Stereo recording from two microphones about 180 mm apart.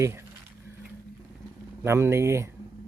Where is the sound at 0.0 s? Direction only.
15° right (ahead or behind).